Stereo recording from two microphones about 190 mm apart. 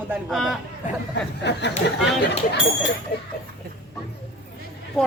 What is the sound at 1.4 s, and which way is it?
Speech, 65° left (ahead or behind).